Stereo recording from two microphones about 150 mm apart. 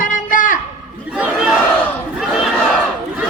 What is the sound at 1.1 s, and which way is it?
Speech, 5° right (ahead or behind).